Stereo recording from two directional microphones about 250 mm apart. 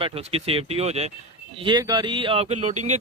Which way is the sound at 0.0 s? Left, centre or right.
Right.